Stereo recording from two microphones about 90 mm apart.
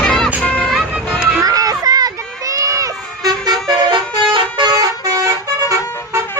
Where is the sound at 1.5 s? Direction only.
45° right (ahead or behind).